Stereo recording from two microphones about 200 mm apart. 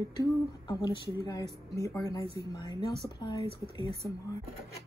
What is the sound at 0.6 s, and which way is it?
A woman's voice, 20° left (ahead or behind).